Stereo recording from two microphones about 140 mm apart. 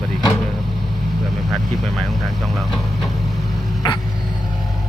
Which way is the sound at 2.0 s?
Centre (ahead or behind).